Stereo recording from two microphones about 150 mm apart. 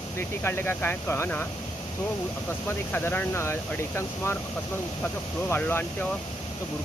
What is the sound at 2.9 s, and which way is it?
Speech, 10° left (ahead or behind).